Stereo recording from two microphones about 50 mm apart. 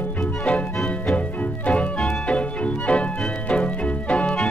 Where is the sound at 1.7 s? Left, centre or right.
Left.